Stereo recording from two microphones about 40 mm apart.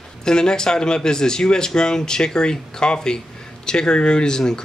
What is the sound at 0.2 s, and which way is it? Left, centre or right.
A man's voice, centre.